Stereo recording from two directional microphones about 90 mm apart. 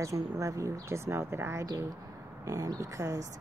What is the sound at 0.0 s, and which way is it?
Speech, 35° right (ahead or behind).